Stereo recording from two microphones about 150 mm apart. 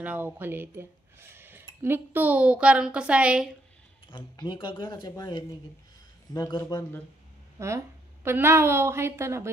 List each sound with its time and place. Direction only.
0.0 s a woman's voice: 10° right (ahead or behind)
1.3 s a sound: 15° right (ahead or behind)
1.8 s a woman's voice: 15° right (ahead or behind)
4.1 s speech: 30° left (ahead or behind)
7.5 s a woman's voice: 20° right (ahead or behind)